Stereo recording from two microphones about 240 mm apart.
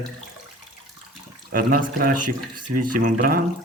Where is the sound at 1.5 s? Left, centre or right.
Right.